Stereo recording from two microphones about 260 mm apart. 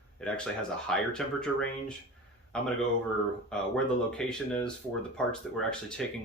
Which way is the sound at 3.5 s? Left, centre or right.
Centre.